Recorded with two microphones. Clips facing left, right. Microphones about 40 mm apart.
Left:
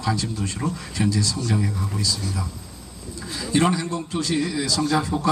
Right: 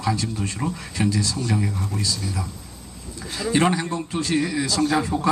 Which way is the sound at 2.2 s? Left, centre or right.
Centre.